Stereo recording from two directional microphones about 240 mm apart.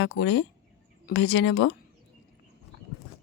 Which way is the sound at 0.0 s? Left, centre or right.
Left.